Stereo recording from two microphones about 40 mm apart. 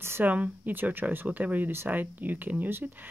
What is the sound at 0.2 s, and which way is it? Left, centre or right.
Speech, right.